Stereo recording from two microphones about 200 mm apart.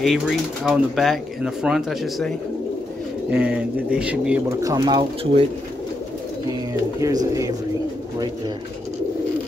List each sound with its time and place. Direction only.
0.0 s speech: centre (ahead or behind); by 5.4 s 25° right (ahead or behind)
7.0 s speech: 15° right (ahead or behind)